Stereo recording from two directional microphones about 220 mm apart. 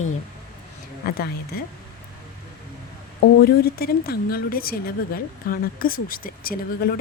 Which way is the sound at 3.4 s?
45° left (ahead or behind).